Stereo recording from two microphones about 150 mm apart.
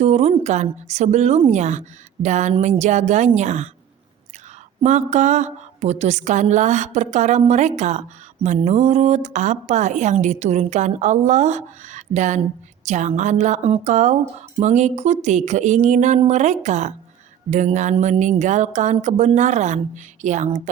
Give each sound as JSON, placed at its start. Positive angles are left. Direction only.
{"t": 0.0, "sound": "a woman's voice", "side_deg": -45}
{"t": 4.8, "sound": "a woman's voice", "side_deg": -50}